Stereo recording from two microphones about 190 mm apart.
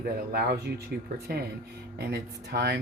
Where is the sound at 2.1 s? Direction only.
60° right (ahead or behind).